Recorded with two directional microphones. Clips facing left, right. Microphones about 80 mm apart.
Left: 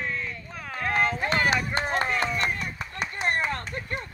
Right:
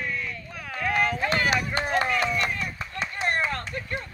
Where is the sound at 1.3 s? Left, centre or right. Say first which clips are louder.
Even; left.